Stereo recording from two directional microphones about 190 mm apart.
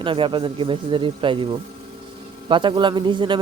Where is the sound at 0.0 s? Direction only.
25° right (ahead or behind).